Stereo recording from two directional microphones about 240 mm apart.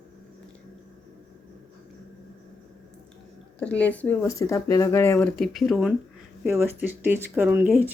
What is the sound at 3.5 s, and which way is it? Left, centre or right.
Speech, centre.